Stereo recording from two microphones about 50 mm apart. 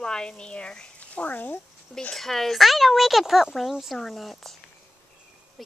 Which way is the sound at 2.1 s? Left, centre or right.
Centre.